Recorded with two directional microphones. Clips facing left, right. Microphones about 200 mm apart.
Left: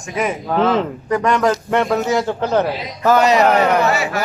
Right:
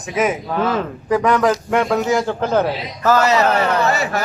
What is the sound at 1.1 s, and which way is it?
A man's voice, centre (ahead or behind).